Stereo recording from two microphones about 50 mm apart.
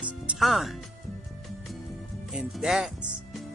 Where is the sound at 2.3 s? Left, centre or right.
Centre.